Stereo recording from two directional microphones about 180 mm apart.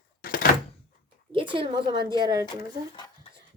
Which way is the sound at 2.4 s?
25° left (ahead or behind).